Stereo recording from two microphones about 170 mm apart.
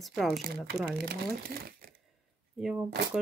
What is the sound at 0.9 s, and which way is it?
Speech, 65° right (ahead or behind).